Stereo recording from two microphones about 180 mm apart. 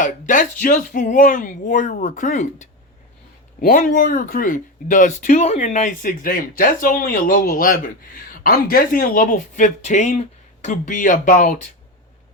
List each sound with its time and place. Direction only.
0.0 s speech: 45° left (ahead or behind)